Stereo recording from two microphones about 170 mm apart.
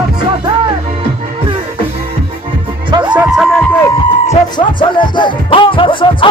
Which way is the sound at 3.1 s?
10° right (ahead or behind).